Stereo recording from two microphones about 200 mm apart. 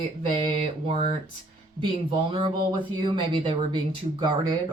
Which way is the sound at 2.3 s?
25° right (ahead or behind).